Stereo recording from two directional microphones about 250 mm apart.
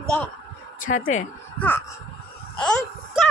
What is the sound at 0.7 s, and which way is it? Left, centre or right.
Speech, left.